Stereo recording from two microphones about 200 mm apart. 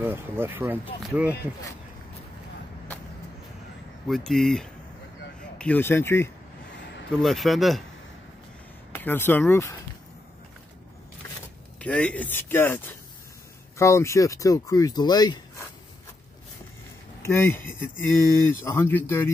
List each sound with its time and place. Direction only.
0.0 s speech: 10° right (ahead or behind)
4.1 s speech: centre (ahead or behind)
7.1 s speech: centre (ahead or behind)
8.9 s speech: 10° left (ahead or behind)
11.8 s speech: 5° left (ahead or behind)
17.2 s speech: 10° left (ahead or behind)